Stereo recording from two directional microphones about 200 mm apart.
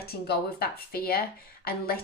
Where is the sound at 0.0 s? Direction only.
50° left (ahead or behind).